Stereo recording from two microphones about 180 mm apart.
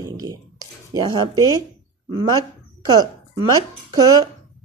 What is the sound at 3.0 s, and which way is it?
Speech, 20° right (ahead or behind).